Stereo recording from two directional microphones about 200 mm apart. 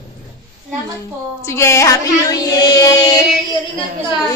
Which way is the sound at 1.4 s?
15° left (ahead or behind).